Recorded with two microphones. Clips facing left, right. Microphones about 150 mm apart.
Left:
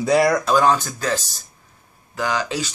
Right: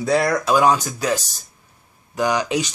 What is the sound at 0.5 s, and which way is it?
Speech, 10° right (ahead or behind).